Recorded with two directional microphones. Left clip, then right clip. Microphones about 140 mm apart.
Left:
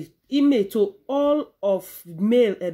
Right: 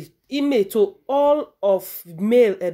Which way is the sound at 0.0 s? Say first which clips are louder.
Left 3 dB; 25° right (ahead or behind).